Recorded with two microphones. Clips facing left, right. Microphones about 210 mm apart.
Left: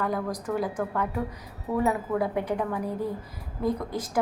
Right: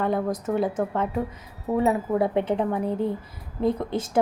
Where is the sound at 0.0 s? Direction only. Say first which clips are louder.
Right 4 dB; 25° right (ahead or behind).